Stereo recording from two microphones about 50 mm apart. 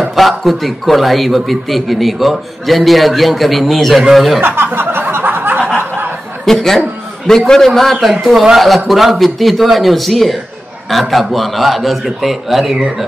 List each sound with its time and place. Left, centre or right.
0.0 s speech: centre
4.4 s speech: right
4.6 s a sound: right
6.4 s speech: centre